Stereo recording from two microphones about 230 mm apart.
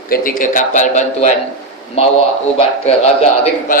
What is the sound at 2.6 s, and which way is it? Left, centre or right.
A man's voice, left.